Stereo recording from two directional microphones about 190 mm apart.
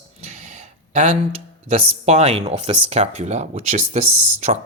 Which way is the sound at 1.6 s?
35° right (ahead or behind).